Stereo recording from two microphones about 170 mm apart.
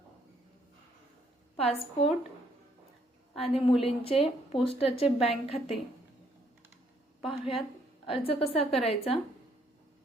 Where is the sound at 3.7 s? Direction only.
35° left (ahead or behind).